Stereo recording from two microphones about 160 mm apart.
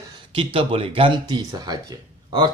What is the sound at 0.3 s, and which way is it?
Speech, 35° right (ahead or behind).